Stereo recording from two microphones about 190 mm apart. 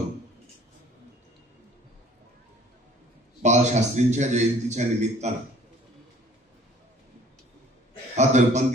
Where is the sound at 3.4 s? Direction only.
35° right (ahead or behind).